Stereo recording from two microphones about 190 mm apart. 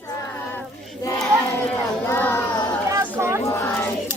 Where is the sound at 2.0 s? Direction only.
10° left (ahead or behind).